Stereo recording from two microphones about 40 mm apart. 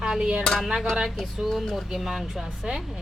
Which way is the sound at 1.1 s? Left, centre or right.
Centre.